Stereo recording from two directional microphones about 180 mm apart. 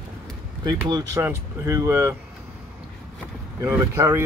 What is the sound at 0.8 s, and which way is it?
Speech, 20° right (ahead or behind).